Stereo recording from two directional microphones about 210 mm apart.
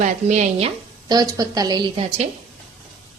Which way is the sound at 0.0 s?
35° right (ahead or behind).